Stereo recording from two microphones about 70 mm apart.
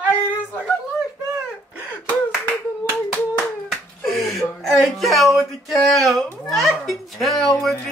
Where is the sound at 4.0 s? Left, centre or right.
Centre.